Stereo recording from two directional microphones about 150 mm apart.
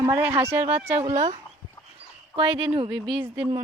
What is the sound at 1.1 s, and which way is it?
Speech, 50° right (ahead or behind).